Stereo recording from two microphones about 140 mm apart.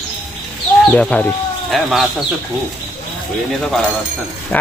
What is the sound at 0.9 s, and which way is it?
Speech, 10° left (ahead or behind).